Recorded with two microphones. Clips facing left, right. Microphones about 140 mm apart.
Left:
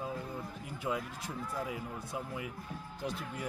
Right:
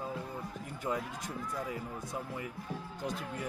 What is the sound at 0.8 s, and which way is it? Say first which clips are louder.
Speech: right 1 dB; 5° left (ahead or behind).